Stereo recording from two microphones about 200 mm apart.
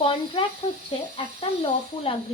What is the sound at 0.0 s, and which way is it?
Speech, 25° left (ahead or behind).